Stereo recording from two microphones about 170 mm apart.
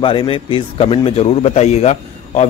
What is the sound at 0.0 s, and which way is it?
A man's voice, 30° left (ahead or behind).